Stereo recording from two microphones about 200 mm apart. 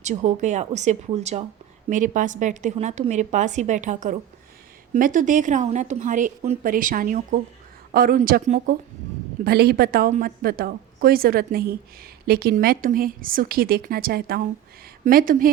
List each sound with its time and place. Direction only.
0.0 s a woman's voice: 35° right (ahead or behind)
9.4 s a woman's voice: 50° right (ahead or behind)